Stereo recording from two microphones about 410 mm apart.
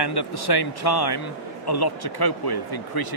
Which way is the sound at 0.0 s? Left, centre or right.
Left.